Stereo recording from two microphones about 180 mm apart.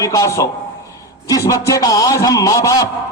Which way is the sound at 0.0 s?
15° left (ahead or behind).